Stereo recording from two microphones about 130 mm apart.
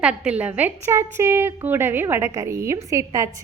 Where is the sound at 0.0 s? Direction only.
5° right (ahead or behind).